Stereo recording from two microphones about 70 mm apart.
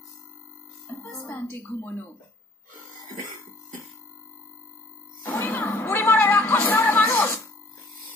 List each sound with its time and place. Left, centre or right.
1.2 s a woman's voice: left
5.3 s music: left